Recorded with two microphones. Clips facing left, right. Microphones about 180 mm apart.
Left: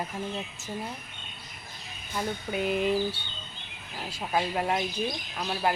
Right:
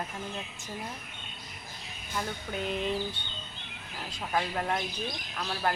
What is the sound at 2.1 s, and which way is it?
Speech, 10° left (ahead or behind).